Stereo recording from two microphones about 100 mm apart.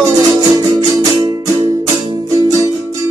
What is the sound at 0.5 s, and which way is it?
Music, 40° right (ahead or behind).